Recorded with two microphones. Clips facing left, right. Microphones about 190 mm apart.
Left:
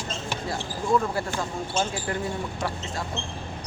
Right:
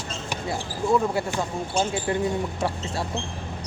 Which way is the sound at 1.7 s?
25° right (ahead or behind).